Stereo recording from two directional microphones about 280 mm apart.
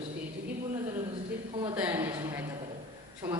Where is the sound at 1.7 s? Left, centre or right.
Centre.